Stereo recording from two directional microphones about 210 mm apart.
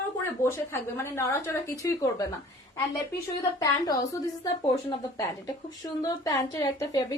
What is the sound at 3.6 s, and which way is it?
A woman's voice, 15° left (ahead or behind).